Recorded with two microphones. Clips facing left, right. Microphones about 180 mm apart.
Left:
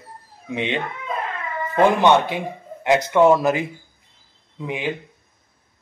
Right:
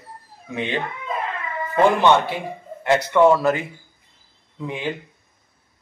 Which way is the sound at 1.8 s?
15° left (ahead or behind).